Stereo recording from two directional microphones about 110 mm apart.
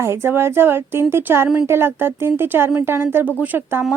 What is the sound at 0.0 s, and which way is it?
A woman's voice, 25° right (ahead or behind).